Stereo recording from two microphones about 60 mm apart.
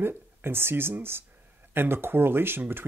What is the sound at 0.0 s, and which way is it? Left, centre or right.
Speech, right.